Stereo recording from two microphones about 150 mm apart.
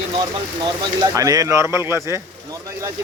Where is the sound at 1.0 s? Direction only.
20° right (ahead or behind).